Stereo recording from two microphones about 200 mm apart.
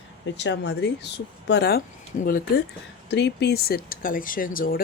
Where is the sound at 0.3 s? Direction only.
60° left (ahead or behind).